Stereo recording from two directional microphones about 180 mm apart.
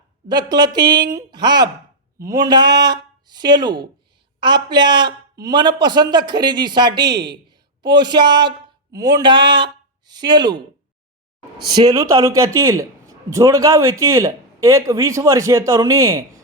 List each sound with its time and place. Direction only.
0.3 s a man's voice: 25° right (ahead or behind)
11.7 s a man's voice: 20° right (ahead or behind)